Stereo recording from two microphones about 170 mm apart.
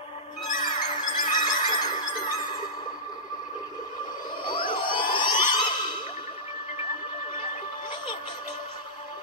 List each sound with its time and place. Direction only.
0.5 s music: 55° left (ahead or behind)
1.4 s squeal: 25° left (ahead or behind)
4.5 s a sound: 25° left (ahead or behind)